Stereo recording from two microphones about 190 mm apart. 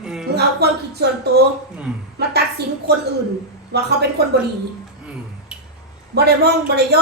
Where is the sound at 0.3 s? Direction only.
60° right (ahead or behind).